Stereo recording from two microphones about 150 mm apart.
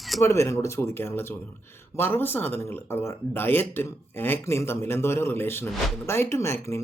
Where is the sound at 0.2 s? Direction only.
20° left (ahead or behind).